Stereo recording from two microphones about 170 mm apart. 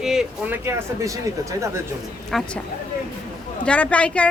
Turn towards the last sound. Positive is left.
turn(degrees=5)  # may be behind; listen again after turning